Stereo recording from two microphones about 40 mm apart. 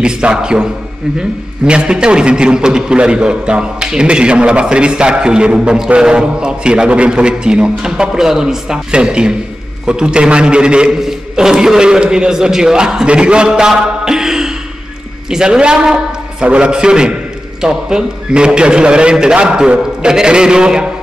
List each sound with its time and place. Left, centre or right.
0.0 s a man's voice: right
1.7 s a man's voice: right
8.7 s a man's voice: right
11.0 s a man's voice: centre